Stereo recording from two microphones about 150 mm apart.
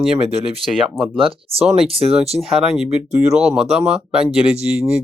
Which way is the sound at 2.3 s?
Centre (ahead or behind).